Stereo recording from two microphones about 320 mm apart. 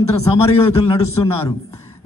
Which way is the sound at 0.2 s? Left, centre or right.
Centre.